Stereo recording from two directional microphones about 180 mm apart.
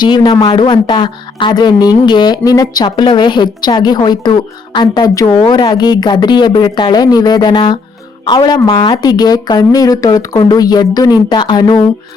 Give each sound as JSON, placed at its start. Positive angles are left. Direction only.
{"t": 0.0, "sound": "a woman's voice", "side_deg": 25}